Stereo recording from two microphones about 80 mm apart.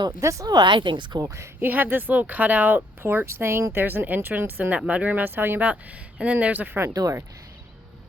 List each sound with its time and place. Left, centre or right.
0.2 s speech: right
0.4 s speech: right
1.2 s speech: right
1.6 s speech: right
6.9 s speech: right